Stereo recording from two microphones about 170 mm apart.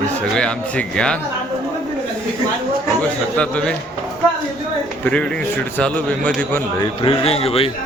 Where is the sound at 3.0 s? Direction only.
5° left (ahead or behind).